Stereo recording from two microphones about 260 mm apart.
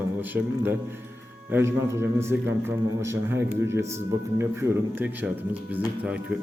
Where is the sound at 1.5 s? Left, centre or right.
Centre.